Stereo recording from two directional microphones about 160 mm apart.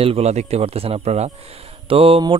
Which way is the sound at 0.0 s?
40° right (ahead or behind).